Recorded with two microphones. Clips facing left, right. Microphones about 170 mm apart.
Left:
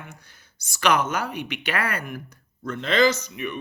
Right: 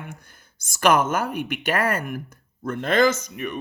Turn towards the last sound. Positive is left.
turn(degrees=-45)  # may be behind; listen again after turning